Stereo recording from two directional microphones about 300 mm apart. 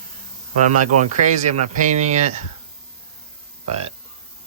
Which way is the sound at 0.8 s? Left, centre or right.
Right.